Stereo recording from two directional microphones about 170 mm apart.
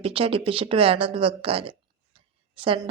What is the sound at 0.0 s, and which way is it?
A woman's voice, 35° right (ahead or behind).